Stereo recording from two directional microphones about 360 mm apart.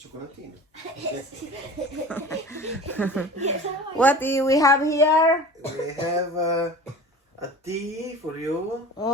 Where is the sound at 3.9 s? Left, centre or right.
Centre.